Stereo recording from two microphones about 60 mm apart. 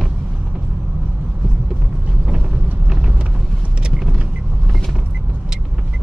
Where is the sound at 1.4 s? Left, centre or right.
Centre.